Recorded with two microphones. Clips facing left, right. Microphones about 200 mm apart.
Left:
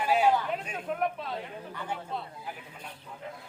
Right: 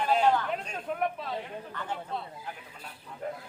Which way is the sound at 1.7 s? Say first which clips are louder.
Even; 10° left (ahead or behind).